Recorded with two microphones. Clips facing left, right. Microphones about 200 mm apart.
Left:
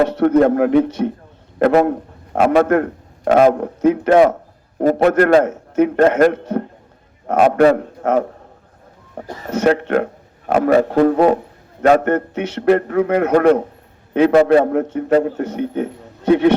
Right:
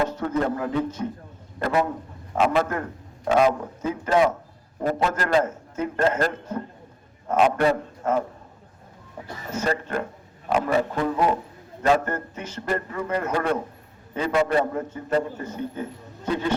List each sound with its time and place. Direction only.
0.0 s a man's voice: 75° left (ahead or behind)